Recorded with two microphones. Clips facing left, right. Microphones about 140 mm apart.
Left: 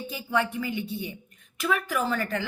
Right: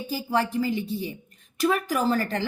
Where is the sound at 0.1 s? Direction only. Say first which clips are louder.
Right 3 dB; 35° right (ahead or behind).